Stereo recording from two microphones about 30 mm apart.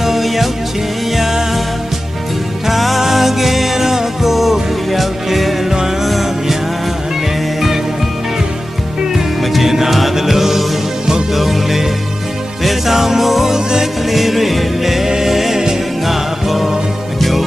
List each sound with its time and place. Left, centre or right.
0.0 s music: centre
2.6 s music: centre
9.4 s music: centre
16.0 s music: centre